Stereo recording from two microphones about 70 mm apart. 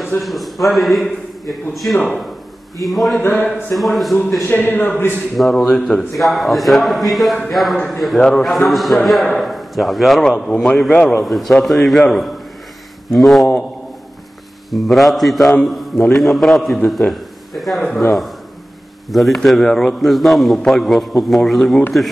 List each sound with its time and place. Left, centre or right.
0.2 s a man's voice: centre
3.2 s a man's voice: left
3.7 s a man's voice: centre
4.5 s a man's voice: left
5.3 s a man's voice: centre
10.4 s a man's voice: centre
14.7 s a man's voice: centre
19.0 s a man's voice: centre